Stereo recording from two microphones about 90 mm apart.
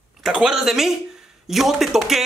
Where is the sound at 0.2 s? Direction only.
5° right (ahead or behind).